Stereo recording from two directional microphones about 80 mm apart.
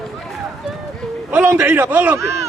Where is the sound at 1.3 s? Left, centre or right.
Right.